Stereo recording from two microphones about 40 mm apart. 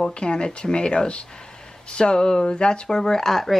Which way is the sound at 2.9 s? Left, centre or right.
Centre.